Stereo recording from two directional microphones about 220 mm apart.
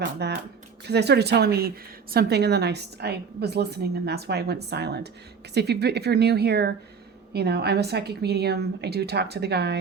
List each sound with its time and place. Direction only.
0.0 s a woman's voice: 50° right (ahead or behind)